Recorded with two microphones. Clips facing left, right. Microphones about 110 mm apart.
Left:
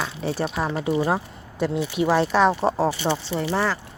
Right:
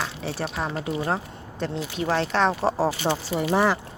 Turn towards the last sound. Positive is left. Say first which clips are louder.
# right 2 dB
turn(degrees=-15)  # may be behind; listen again after turning